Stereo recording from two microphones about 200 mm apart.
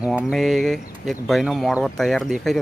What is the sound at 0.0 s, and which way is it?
Speech, 5° right (ahead or behind).